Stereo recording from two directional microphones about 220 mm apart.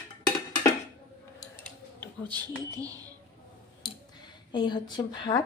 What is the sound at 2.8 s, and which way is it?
Speech, 15° right (ahead or behind).